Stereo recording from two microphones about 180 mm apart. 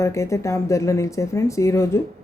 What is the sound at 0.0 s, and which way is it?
Speech, 15° left (ahead or behind).